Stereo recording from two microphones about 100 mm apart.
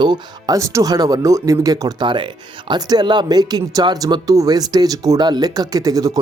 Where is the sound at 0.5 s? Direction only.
30° right (ahead or behind).